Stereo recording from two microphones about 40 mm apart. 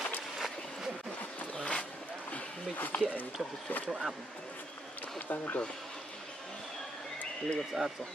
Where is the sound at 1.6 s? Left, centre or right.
Left.